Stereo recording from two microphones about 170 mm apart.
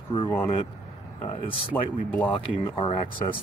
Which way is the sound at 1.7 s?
10° left (ahead or behind).